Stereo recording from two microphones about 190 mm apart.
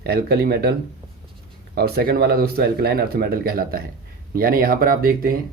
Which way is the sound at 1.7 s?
55° right (ahead or behind).